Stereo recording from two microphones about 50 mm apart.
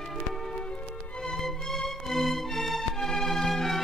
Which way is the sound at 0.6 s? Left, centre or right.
Centre.